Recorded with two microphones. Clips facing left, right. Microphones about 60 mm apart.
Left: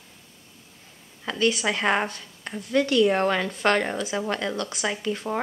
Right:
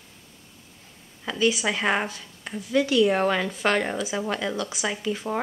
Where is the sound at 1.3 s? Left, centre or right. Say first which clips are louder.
Even; centre.